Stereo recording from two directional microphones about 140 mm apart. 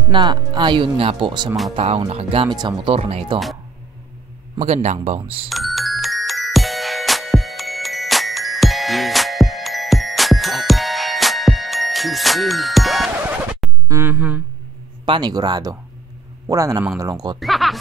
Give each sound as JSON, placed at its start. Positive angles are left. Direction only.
{"t": 0.1, "sound": "speech", "side_deg": -35}
{"t": 1.8, "sound": "speech", "side_deg": -50}
{"t": 2.9, "sound": "speech", "side_deg": -45}
{"t": 4.6, "sound": "speech", "side_deg": -30}
{"t": 5.0, "sound": "speech", "side_deg": -45}
{"t": 5.5, "sound": "music", "side_deg": 0}
{"t": 13.8, "sound": "speech", "side_deg": -20}
{"t": 15.0, "sound": "speech", "side_deg": -30}
{"t": 17.4, "sound": "speech", "side_deg": 0}